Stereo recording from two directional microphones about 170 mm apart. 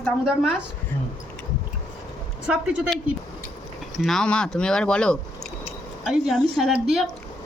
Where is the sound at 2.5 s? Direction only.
5° right (ahead or behind).